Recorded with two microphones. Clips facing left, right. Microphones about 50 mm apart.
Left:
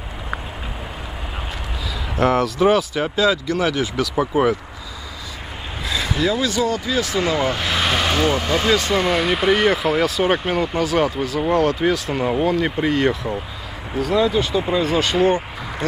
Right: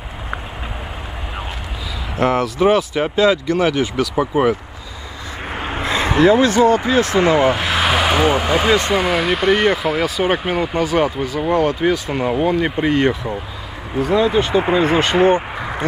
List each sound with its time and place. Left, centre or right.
2.1 s speech: centre
3.2 s speech: right
5.8 s speech: right
7.4 s speech: centre
8.9 s speech: centre; by 15.8 s right